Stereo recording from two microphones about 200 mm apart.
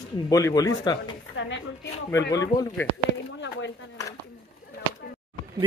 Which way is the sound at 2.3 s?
15° left (ahead or behind).